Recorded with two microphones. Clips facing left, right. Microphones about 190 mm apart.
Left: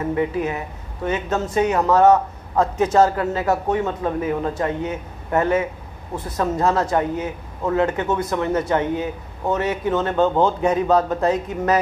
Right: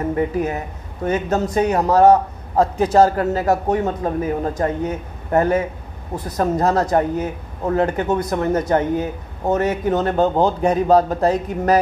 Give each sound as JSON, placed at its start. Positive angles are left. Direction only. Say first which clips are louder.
{"t": 0.1, "sound": "a man's voice", "louder": "even", "side_deg": -40}